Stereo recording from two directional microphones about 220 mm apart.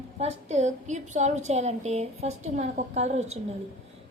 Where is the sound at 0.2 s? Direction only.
30° right (ahead or behind).